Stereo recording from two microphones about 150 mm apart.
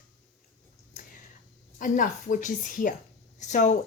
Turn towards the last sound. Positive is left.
turn(degrees=55)  # may be behind; listen again after turning